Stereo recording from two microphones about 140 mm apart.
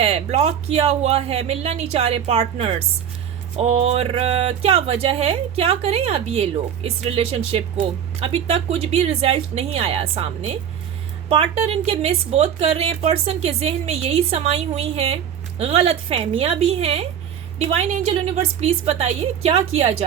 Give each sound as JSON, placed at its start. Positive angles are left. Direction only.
{"t": 0.0, "sound": "speech", "side_deg": -50}